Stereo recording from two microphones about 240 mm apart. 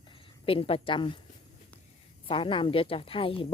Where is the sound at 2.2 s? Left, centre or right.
Left.